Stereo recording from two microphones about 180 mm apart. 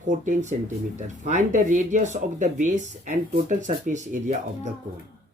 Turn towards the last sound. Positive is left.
turn(degrees=-45)  # may be behind; listen again after turning